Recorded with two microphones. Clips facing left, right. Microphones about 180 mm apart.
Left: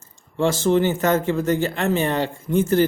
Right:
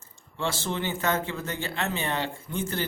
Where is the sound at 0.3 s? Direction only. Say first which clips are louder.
Left 12 dB; 45° left (ahead or behind).